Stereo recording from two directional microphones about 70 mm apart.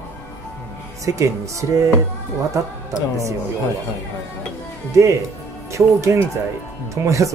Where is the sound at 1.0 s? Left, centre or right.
Right.